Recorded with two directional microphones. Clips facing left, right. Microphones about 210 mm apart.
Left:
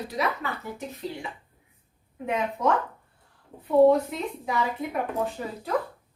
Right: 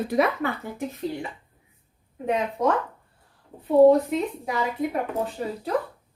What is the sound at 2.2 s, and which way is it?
Speech, 35° right (ahead or behind).